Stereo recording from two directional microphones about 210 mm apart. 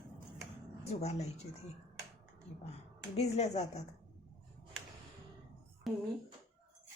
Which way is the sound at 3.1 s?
30° left (ahead or behind).